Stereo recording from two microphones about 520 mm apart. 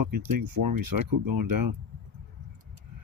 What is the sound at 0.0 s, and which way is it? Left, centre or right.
Speech, right.